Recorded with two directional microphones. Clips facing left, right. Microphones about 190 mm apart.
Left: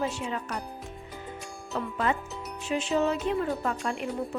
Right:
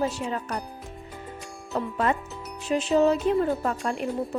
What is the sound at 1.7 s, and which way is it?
Music, 40° right (ahead or behind).